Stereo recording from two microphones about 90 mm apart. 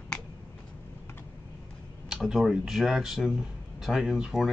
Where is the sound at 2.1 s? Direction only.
5° right (ahead or behind).